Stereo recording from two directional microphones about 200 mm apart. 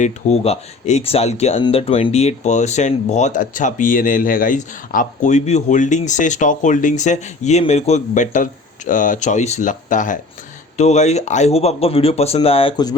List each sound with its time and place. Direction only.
0.0 s speech: 30° left (ahead or behind)